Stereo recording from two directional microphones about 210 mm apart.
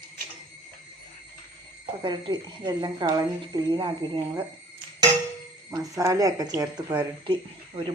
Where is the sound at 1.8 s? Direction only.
20° right (ahead or behind).